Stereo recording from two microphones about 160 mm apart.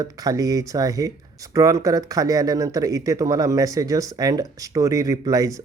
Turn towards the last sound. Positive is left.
turn(degrees=-20)  # may be behind; listen again after turning